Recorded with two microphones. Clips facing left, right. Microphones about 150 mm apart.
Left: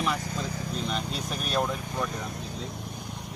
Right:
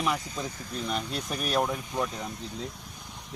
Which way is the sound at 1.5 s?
15° right (ahead or behind).